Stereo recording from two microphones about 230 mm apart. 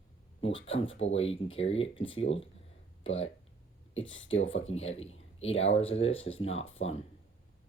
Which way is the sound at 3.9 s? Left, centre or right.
Left.